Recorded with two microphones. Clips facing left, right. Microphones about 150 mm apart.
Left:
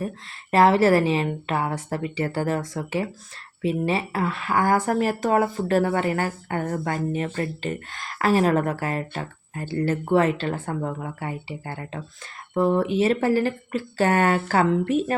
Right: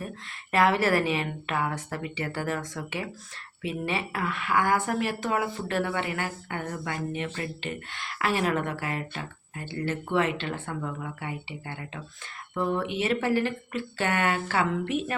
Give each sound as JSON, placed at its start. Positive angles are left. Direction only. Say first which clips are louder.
{"t": 0.5, "sound": "speech", "louder": "left 6 dB", "side_deg": 35}